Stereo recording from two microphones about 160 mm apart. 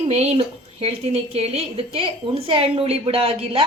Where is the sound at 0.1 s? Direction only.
40° right (ahead or behind).